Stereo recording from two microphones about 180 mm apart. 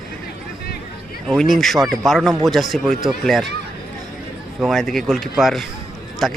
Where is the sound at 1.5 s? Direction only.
Centre (ahead or behind).